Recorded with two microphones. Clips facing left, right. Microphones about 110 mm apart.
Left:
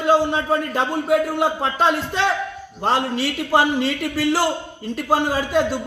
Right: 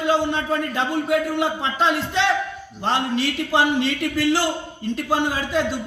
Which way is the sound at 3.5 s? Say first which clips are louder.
Left 2 dB; 50° left (ahead or behind).